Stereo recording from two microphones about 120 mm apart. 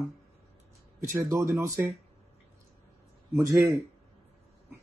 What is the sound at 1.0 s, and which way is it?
Speech, 25° right (ahead or behind).